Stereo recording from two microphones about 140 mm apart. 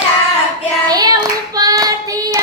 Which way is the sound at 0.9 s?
30° right (ahead or behind).